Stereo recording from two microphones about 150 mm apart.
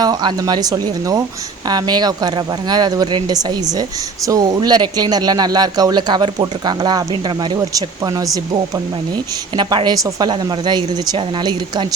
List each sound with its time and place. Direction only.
0.0 s speech: 25° right (ahead or behind)
9.6 s speech: 30° right (ahead or behind)